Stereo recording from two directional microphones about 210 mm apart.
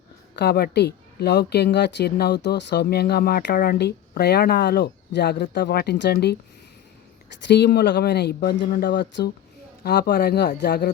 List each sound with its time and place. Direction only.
0.3 s speech: 50° left (ahead or behind)
7.4 s speech: 50° left (ahead or behind)